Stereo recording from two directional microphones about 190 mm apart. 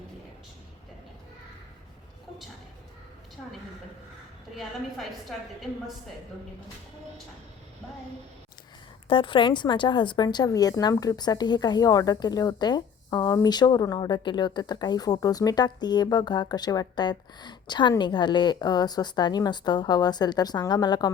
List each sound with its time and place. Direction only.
9.0 s a woman's voice: 25° left (ahead or behind)